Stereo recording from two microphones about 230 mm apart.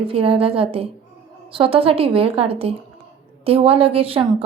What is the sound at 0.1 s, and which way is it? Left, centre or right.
A woman's voice, right.